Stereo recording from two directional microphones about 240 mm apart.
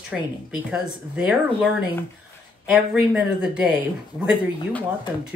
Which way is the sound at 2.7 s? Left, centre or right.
Centre.